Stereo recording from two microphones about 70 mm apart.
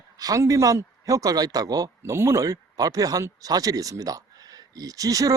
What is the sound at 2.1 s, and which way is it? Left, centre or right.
Speech, right.